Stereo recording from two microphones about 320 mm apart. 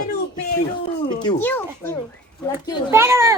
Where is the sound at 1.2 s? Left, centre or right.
Centre.